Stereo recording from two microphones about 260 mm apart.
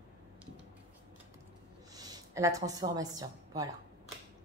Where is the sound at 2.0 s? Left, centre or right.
Centre.